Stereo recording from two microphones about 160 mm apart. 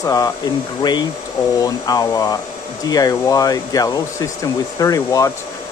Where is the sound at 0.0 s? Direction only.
20° left (ahead or behind).